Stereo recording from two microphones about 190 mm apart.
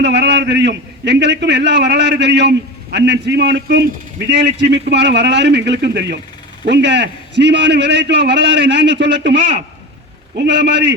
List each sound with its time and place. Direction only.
0.0 s a man's voice: 65° right (ahead or behind)